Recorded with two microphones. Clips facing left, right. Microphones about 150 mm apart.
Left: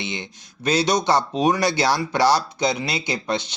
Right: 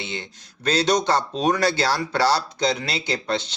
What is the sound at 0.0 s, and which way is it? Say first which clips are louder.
Speech: left 2 dB; 15° left (ahead or behind).